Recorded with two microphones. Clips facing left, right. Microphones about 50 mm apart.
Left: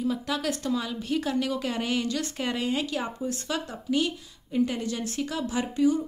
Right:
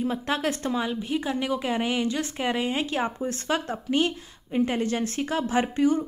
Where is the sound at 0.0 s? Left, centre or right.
Right.